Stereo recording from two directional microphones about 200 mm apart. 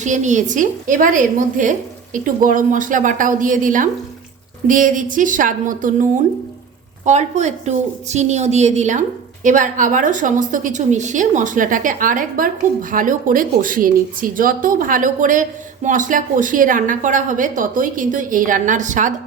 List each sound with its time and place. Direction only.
0.0 s speech: 35° right (ahead or behind)